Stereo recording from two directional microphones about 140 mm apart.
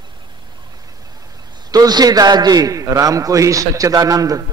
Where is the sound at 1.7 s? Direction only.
30° right (ahead or behind).